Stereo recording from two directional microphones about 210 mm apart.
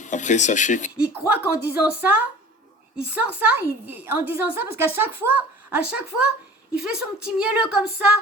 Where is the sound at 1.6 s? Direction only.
5° right (ahead or behind).